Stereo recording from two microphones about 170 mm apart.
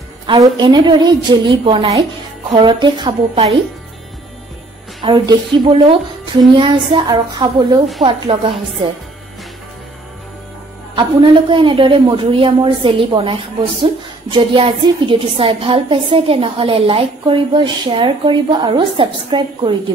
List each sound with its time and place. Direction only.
0.3 s a woman's voice: 25° right (ahead or behind)
5.0 s a woman's voice: 25° right (ahead or behind)
11.5 s a woman's voice: 30° right (ahead or behind)